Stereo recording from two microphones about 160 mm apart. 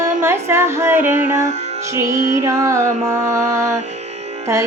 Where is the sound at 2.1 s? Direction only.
20° right (ahead or behind).